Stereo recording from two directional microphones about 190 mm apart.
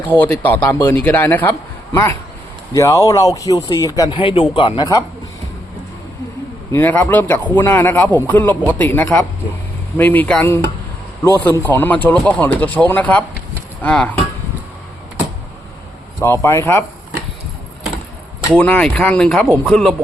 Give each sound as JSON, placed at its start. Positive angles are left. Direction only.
{"t": 0.0, "sound": "speech", "side_deg": 10}
{"t": 2.7, "sound": "speech", "side_deg": 15}
{"t": 6.7, "sound": "speech", "side_deg": 10}
{"t": 16.2, "sound": "speech", "side_deg": 15}
{"t": 18.5, "sound": "speech", "side_deg": 5}